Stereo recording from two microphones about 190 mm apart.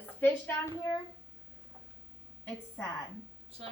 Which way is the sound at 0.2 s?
10° left (ahead or behind).